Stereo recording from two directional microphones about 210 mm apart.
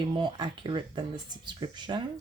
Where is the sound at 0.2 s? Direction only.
20° right (ahead or behind).